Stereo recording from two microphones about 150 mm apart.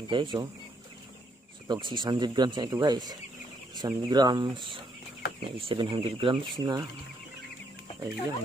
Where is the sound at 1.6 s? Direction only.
30° right (ahead or behind).